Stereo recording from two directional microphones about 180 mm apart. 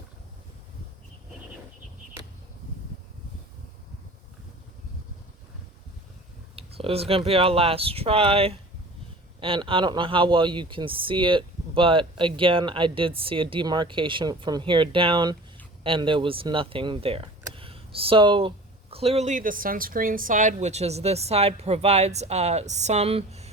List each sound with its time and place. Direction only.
6.6 s speech: 30° right (ahead or behind)